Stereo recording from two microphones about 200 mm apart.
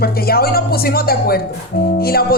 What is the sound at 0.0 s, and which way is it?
A woman's voice, 50° left (ahead or behind).